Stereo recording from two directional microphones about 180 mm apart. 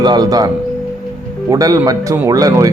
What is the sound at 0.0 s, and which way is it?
Speech, 20° right (ahead or behind).